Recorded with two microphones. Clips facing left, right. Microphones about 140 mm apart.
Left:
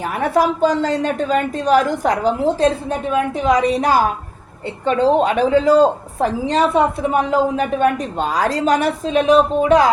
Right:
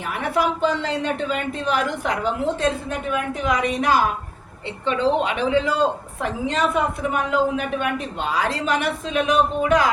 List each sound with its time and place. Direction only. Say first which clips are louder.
0.0 s a woman's voice: left 5 dB; 40° left (ahead or behind)